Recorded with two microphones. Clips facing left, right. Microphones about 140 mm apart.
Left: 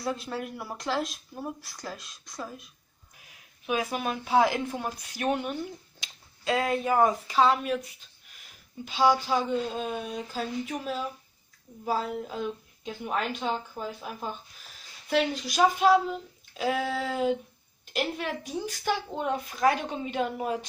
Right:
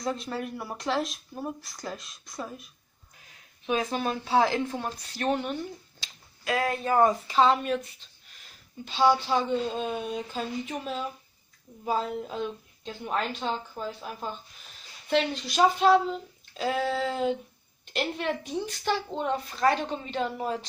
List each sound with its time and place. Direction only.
0.0 s speech: 5° left (ahead or behind)
6.4 s speech: 20° left (ahead or behind)
6.9 s speech: 5° left (ahead or behind)
8.8 s speech: 10° left (ahead or behind)